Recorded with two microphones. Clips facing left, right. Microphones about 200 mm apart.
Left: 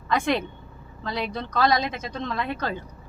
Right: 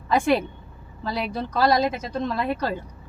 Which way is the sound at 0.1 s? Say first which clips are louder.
Right 4 dB; 10° right (ahead or behind).